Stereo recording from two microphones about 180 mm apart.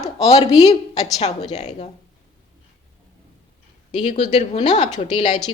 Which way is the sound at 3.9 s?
40° left (ahead or behind).